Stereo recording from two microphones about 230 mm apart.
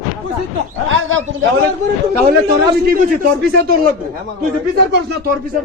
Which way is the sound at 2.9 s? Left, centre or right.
Right.